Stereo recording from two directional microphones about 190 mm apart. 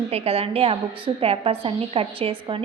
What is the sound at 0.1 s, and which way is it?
A woman's voice, 30° right (ahead or behind).